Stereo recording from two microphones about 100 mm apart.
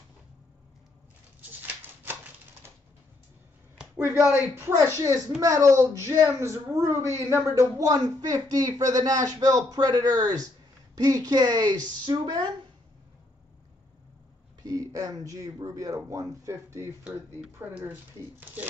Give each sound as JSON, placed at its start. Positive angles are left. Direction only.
{"t": 1.4, "sound": "a sound", "side_deg": -20}
{"t": 4.6, "sound": "a woman's voice", "side_deg": -25}
{"t": 14.6, "sound": "speech", "side_deg": -35}
{"t": 17.6, "sound": "a woman's voice", "side_deg": -20}